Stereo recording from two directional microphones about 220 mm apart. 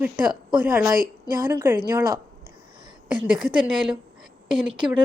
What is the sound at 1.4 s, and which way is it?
Speech, 10° right (ahead or behind).